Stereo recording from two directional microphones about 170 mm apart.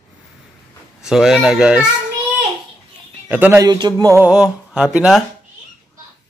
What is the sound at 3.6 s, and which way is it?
Speech, 25° right (ahead or behind).